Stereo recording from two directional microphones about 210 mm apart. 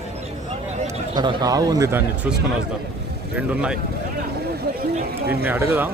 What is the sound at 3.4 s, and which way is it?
Speech, 5° right (ahead or behind).